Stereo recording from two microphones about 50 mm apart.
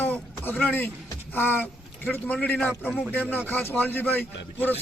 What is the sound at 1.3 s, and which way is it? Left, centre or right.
Speech, left.